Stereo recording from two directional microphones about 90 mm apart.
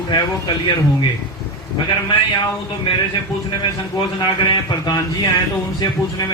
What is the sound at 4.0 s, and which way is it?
Speech, 60° left (ahead or behind).